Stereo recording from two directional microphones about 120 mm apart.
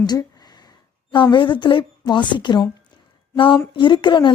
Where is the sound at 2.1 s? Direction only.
40° left (ahead or behind).